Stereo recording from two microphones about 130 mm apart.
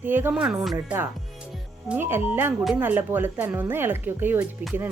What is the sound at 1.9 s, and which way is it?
A woman's voice, 15° right (ahead or behind).